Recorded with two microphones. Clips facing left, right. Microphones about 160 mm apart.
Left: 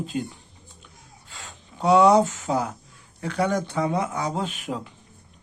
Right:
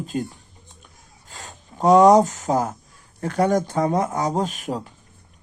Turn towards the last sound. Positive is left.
turn(degrees=-40)  # may be behind; listen again after turning